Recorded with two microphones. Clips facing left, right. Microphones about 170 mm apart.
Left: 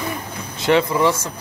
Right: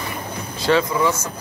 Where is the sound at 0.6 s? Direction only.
20° left (ahead or behind).